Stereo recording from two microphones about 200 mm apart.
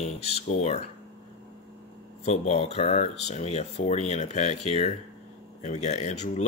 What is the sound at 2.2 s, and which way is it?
Speech, 30° left (ahead or behind).